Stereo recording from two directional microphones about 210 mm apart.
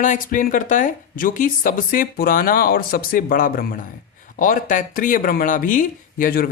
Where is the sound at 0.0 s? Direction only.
40° left (ahead or behind).